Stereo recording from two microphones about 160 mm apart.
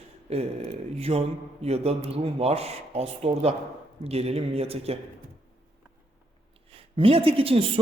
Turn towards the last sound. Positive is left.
turn(degrees=-35)  # may be behind; listen again after turning